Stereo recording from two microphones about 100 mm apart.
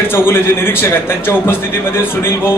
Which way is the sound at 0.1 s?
25° left (ahead or behind).